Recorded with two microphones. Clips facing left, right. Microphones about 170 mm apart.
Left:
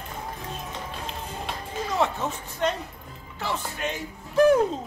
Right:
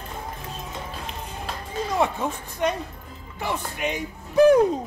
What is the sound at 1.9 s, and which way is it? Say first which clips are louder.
A woman's voice: right 2 dB; 10° right (ahead or behind).